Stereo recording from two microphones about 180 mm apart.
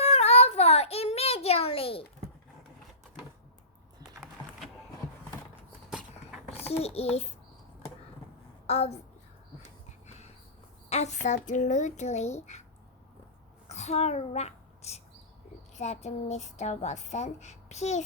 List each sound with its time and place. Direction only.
0.0 s child singing: 35° left (ahead or behind)
6.6 s a child's voice: 35° left (ahead or behind)
8.6 s a sound: 35° left (ahead or behind)
10.8 s a woman's voice: 40° left (ahead or behind)
13.7 s a child's voice: 40° left (ahead or behind)